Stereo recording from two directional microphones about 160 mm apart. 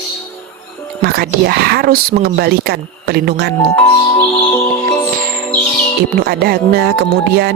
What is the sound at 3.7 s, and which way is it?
Music, 15° left (ahead or behind).